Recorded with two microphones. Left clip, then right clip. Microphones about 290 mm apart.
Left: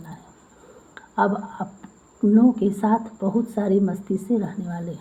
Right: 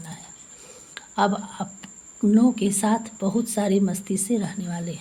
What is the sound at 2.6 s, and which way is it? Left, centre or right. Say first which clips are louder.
Speech: left 2 dB; right.